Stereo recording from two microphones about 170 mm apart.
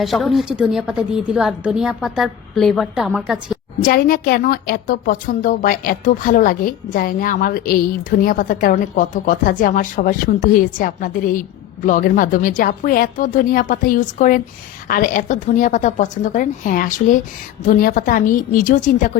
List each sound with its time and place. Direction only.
0.0 s a woman's voice: centre (ahead or behind)
3.8 s a woman's voice: 60° left (ahead or behind)